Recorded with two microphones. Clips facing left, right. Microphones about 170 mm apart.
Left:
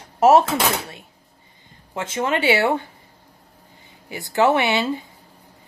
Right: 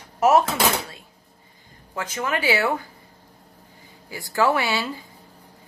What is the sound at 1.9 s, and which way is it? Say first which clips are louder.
Speech: left 4 dB; 25° left (ahead or behind).